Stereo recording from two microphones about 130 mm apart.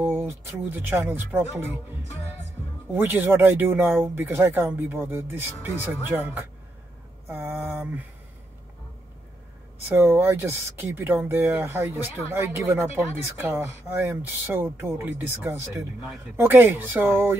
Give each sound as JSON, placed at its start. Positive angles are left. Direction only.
{"t": 0.0, "sound": "speech", "side_deg": -15}
{"t": 2.9, "sound": "speech", "side_deg": -15}
{"t": 7.2, "sound": "a sound", "side_deg": -15}
{"t": 9.8, "sound": "speech", "side_deg": -15}